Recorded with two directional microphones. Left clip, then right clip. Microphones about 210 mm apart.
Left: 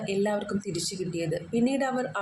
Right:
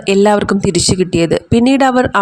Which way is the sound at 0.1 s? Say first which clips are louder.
Right 18 dB; 45° right (ahead or behind).